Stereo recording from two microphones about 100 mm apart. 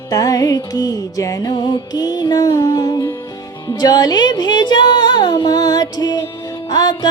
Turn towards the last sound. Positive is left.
turn(degrees=45)  # may be behind; listen again after turning